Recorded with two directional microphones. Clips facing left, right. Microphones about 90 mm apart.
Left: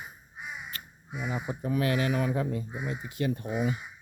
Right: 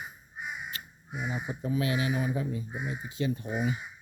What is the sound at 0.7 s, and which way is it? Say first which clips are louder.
Crow: right 1 dB; 50° left (ahead or behind).